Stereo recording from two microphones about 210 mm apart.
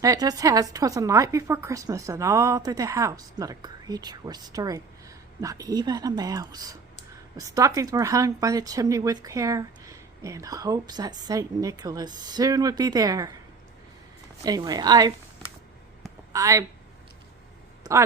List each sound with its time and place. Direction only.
0.0 s a woman's voice: 15° right (ahead or behind)
14.4 s a woman's voice: 15° right (ahead or behind)
16.0 s a sound: 15° right (ahead or behind)